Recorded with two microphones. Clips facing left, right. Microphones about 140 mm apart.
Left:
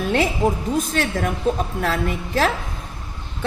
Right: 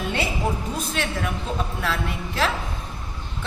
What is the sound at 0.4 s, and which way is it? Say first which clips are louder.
A woman's voice: left 6 dB; 45° left (ahead or behind).